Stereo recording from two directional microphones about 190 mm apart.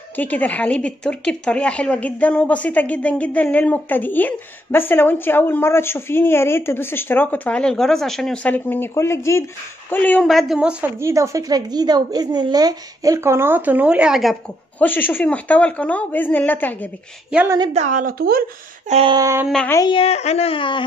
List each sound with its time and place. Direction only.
0.1 s a woman's voice: 10° left (ahead or behind)
14.8 s speech: 10° left (ahead or behind)
17.3 s a woman's voice: 5° right (ahead or behind)
17.7 s speech: 40° right (ahead or behind)
18.9 s a sound: 30° right (ahead or behind)
19.1 s a woman's voice: 15° right (ahead or behind)
19.4 s speech: 5° left (ahead or behind)
19.7 s speech: 25° left (ahead or behind)